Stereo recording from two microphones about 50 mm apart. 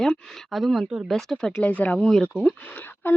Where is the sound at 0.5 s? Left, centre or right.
Centre.